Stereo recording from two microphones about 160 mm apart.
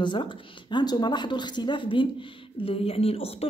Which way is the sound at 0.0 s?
30° left (ahead or behind).